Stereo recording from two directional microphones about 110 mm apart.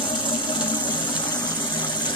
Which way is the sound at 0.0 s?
45° left (ahead or behind).